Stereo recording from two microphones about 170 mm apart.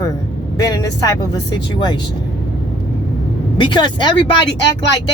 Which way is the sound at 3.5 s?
30° left (ahead or behind).